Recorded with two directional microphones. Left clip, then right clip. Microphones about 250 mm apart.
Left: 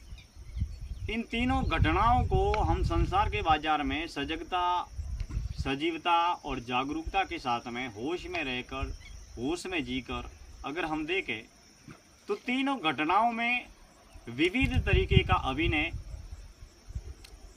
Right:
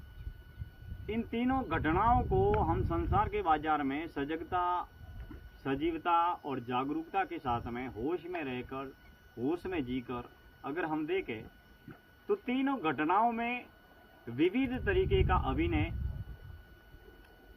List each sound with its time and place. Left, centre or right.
1.0 s speech: centre